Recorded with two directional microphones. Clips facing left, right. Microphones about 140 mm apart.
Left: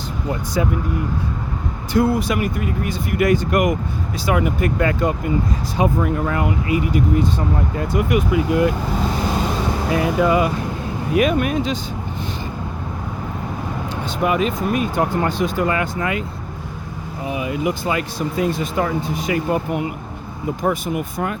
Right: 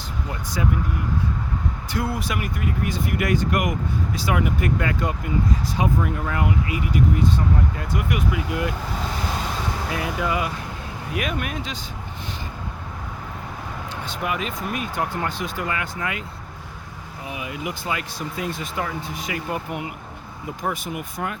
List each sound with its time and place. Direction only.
0.6 s speech: 30° left (ahead or behind)
1.9 s speech: 30° left (ahead or behind)
9.1 s speech: 25° left (ahead or behind)
14.2 s speech: 30° left (ahead or behind)
17.2 s speech: 35° left (ahead or behind)